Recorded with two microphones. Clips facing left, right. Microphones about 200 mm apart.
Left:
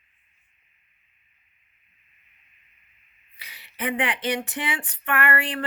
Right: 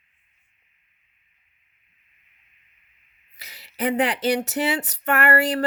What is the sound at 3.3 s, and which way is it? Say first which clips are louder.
Speech: right 5 dB; 40° right (ahead or behind).